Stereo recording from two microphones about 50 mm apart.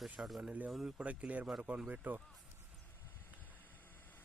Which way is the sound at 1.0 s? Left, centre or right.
Right.